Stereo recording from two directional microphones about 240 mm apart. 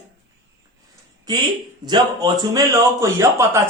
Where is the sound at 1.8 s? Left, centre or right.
Centre.